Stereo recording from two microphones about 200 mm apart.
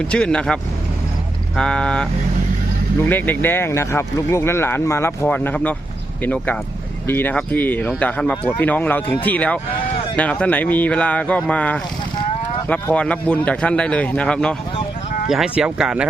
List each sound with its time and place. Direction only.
0.0 s a man's voice: 5° left (ahead or behind)
3.1 s a man's voice: 10° left (ahead or behind)